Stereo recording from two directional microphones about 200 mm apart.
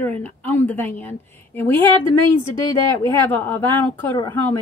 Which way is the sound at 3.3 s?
10° left (ahead or behind).